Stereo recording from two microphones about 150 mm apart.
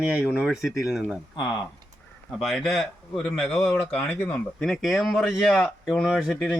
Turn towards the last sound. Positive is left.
turn(degrees=-5)  # may be behind; listen again after turning